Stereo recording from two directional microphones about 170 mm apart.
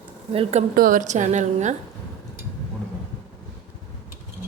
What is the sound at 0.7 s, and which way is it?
A woman's voice, 55° right (ahead or behind).